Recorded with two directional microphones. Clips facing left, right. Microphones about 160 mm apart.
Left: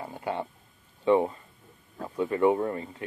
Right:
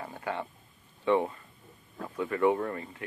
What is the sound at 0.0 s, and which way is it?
Speech, 20° left (ahead or behind).